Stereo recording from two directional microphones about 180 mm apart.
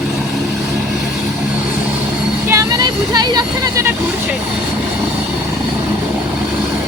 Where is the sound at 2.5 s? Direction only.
20° right (ahead or behind).